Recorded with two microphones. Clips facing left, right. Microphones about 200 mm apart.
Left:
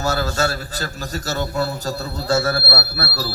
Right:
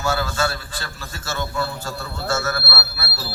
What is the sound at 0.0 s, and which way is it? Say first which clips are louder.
A man's voice: left 2 dB; 40° left (ahead or behind).